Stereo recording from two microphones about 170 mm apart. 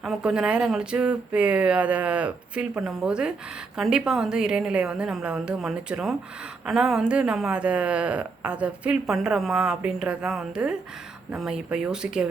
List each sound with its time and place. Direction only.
0.0 s speech: centre (ahead or behind)